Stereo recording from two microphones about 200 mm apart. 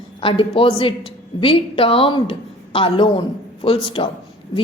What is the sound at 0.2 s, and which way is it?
A woman's voice, 25° left (ahead or behind).